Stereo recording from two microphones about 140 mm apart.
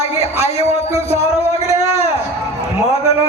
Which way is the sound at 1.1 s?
20° right (ahead or behind).